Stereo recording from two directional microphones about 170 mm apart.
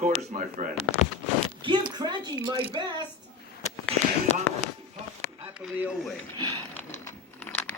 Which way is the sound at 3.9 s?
35° right (ahead or behind).